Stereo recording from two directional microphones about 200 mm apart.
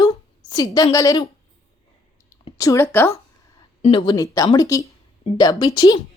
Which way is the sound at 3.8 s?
25° left (ahead or behind).